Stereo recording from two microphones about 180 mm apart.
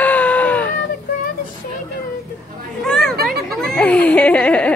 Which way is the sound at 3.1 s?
60° right (ahead or behind).